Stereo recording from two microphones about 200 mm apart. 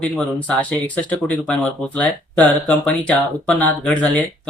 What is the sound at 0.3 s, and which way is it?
Speech, 5° left (ahead or behind).